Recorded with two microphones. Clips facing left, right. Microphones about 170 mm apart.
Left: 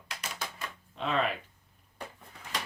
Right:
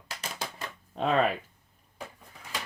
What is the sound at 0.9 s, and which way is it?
Speech, 45° right (ahead or behind).